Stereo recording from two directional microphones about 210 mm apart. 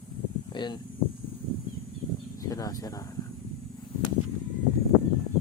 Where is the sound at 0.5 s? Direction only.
20° left (ahead or behind).